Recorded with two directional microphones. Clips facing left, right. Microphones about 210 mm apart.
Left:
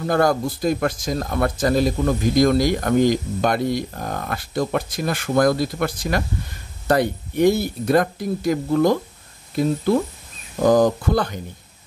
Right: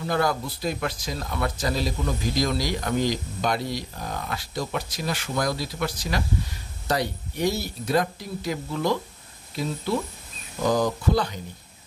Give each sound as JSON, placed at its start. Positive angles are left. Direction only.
{"t": 0.0, "sound": "speech", "side_deg": 45}